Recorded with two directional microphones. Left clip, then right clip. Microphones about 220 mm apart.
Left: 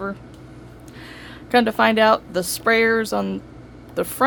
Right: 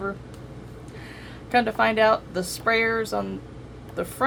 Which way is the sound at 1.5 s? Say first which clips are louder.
Left 4 dB; 35° left (ahead or behind).